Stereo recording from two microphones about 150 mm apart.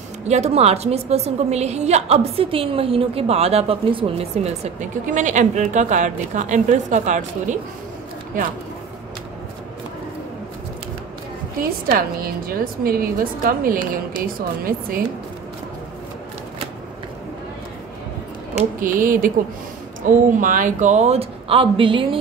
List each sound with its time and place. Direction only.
0.3 s a woman's voice: 45° right (ahead or behind)
11.9 s a woman's voice: 80° right
18.8 s a woman's voice: 65° right (ahead or behind); by 22.2 s 35° right (ahead or behind)